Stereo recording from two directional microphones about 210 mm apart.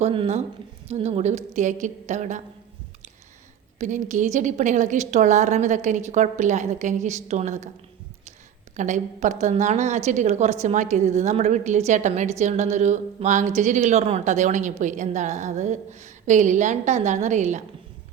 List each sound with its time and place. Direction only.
0.0 s a woman's voice: 30° right (ahead or behind)
3.8 s a woman's voice: 35° right (ahead or behind)
8.7 s a woman's voice: 35° right (ahead or behind)